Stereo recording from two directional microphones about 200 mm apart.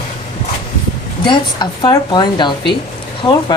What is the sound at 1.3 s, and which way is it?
A woman's voice, 20° left (ahead or behind).